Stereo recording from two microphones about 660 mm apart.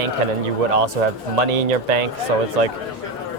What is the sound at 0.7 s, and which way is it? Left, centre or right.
Speech, right.